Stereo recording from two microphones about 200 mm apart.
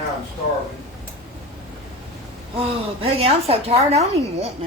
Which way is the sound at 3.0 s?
30° right (ahead or behind).